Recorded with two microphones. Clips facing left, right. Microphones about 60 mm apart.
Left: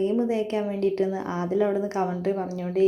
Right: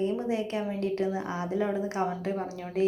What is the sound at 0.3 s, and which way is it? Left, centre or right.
Speech, left.